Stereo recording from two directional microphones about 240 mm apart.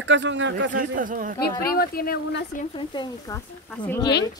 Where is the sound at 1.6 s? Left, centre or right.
Left.